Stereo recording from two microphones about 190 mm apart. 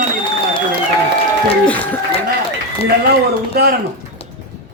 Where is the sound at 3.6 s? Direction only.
55° right (ahead or behind).